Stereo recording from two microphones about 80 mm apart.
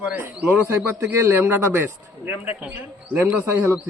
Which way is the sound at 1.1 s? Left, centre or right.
Right.